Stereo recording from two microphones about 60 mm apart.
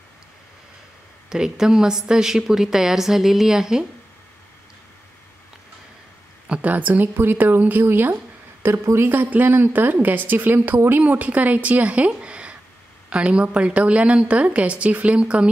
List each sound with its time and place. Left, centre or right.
1.3 s a woman's voice: centre
6.5 s speech: right
8.8 s speech: right
9.1 s a woman's voice: right